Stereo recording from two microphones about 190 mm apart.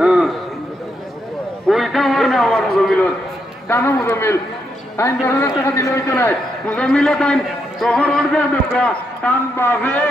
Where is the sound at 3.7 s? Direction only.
15° left (ahead or behind).